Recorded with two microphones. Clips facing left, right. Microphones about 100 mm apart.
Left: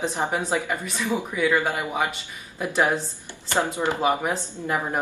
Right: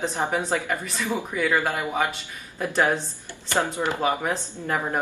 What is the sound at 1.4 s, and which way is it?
A man's voice, centre (ahead or behind).